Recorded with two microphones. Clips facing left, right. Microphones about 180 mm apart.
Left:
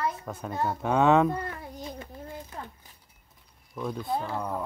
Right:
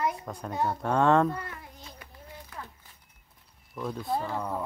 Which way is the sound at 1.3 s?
30° left (ahead or behind).